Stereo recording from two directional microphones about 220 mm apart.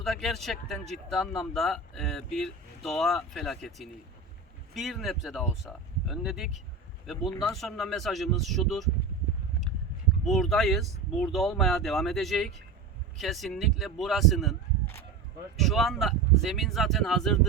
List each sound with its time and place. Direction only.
0.0 s speech: centre (ahead or behind)
10.2 s speech: centre (ahead or behind)
15.5 s speech: centre (ahead or behind)